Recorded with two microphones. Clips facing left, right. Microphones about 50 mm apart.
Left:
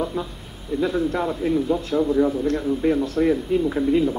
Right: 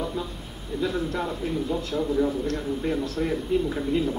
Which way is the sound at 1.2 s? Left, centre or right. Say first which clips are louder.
Left 6 dB; left.